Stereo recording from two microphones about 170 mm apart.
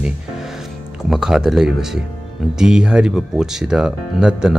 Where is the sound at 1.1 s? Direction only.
5° right (ahead or behind).